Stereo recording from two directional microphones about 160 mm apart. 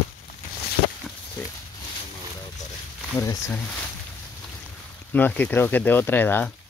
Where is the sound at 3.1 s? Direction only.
20° left (ahead or behind).